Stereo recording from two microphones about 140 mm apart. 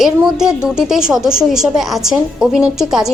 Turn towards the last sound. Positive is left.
turn(degrees=-5)  # may be behind; listen again after turning